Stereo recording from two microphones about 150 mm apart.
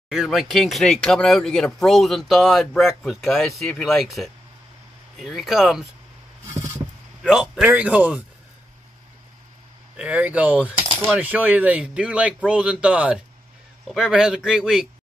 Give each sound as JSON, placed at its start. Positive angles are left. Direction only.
{"t": 0.1, "sound": "speech", "side_deg": -5}
{"t": 7.2, "sound": "speech", "side_deg": -5}
{"t": 9.9, "sound": "speech", "side_deg": -10}
{"t": 10.7, "sound": "coin", "side_deg": -35}
{"t": 11.1, "sound": "speech", "side_deg": -10}